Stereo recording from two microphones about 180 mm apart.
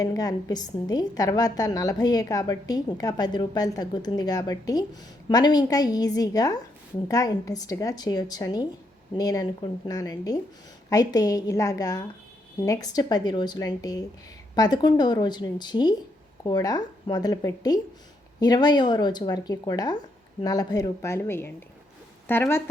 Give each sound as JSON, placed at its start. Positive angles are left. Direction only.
{"t": 0.0, "sound": "a woman's voice", "side_deg": 20}